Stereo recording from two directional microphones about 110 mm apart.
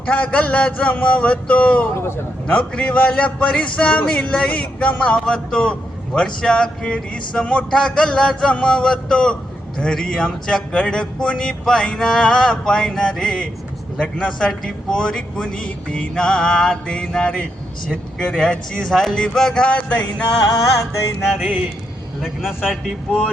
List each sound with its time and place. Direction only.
0.1 s a man's voice: 10° left (ahead or behind)
2.0 s a man's voice: 20° left (ahead or behind)
2.6 s a man's voice: 10° left (ahead or behind)
21.3 s speech: 10° right (ahead or behind)